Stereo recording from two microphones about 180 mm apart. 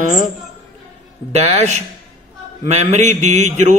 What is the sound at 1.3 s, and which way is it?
A man's voice, 35° right (ahead or behind).